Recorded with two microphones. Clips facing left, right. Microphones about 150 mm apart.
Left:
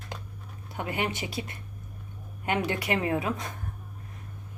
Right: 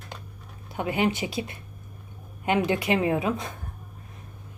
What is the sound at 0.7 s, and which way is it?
A woman's voice, 20° right (ahead or behind).